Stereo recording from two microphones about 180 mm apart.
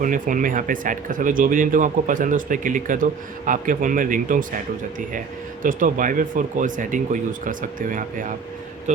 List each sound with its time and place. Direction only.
0.0 s speech: 50° right (ahead or behind)
5.6 s speech: 50° right (ahead or behind)